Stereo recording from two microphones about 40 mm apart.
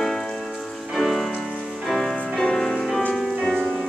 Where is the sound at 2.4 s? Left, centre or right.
Centre.